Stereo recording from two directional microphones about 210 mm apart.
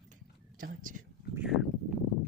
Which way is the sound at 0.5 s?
40° right (ahead or behind).